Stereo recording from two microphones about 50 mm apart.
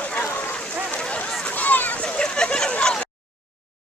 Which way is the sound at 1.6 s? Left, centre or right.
Left.